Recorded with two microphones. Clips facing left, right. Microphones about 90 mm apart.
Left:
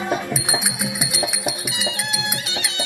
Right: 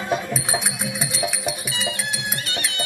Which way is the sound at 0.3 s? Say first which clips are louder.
Left 1 dB; 15° left (ahead or behind).